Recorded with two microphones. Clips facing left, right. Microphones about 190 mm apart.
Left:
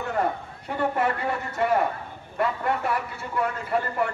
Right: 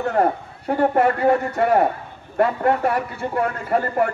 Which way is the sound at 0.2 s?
50° right (ahead or behind).